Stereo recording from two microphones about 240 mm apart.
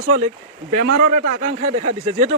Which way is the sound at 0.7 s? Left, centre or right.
Right.